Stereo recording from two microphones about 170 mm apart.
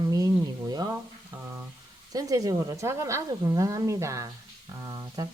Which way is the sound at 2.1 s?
20° right (ahead or behind).